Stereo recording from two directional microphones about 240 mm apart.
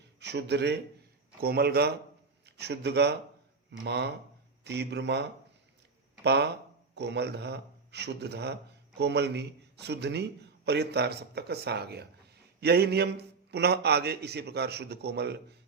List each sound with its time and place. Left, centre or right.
0.2 s a man's voice: right
6.2 s a man's voice: right